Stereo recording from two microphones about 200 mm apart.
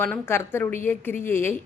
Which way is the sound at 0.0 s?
10° left (ahead or behind).